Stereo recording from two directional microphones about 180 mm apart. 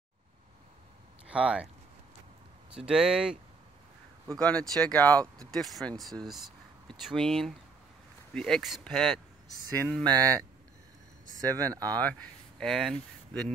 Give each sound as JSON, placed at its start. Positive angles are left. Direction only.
{"t": 1.2, "sound": "speech", "side_deg": -5}
{"t": 2.9, "sound": "speech", "side_deg": -5}
{"t": 4.4, "sound": "speech", "side_deg": 5}
{"t": 10.0, "sound": "speech", "side_deg": -20}
{"t": 11.4, "sound": "speech", "side_deg": -20}
{"t": 12.0, "sound": "speech", "side_deg": 5}